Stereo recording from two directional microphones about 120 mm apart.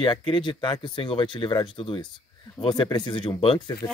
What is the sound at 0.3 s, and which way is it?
Speech, 40° left (ahead or behind).